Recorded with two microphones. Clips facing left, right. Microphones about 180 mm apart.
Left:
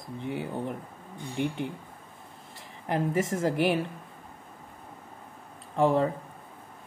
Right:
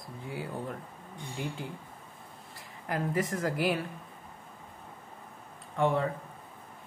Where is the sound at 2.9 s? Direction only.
25° left (ahead or behind).